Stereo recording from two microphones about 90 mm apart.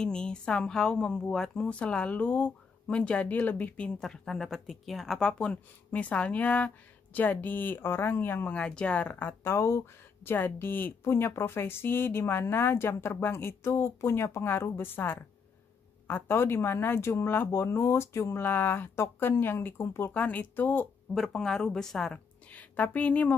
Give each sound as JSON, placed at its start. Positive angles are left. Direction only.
{"t": 0.0, "sound": "speech", "side_deg": 10}
{"t": 5.4, "sound": "speech", "side_deg": 15}
{"t": 8.5, "sound": "speech", "side_deg": 10}
{"t": 21.1, "sound": "a woman's voice", "side_deg": 5}